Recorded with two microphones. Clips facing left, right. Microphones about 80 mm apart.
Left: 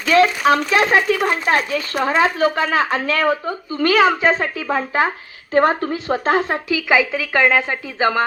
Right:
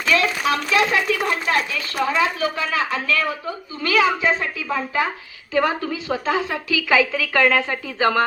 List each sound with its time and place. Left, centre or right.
0.1 s speech: left
6.7 s a woman's voice: left